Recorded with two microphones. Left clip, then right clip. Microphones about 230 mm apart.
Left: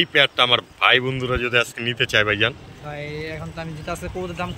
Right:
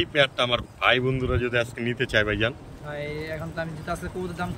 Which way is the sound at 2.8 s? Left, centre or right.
Left.